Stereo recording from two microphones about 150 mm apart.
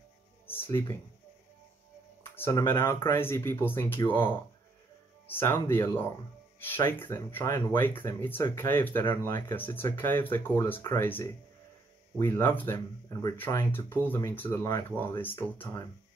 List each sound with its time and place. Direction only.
0.5 s speech: 15° left (ahead or behind)
2.3 s speech: 15° left (ahead or behind)